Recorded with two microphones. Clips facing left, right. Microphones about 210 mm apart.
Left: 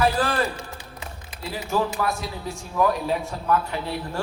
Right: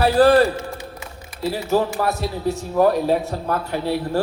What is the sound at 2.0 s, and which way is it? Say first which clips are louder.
A man's voice: right 6 dB; 35° right (ahead or behind).